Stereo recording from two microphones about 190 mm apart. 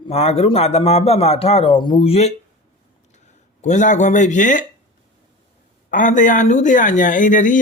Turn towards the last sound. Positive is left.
turn(degrees=40)  # may be behind; listen again after turning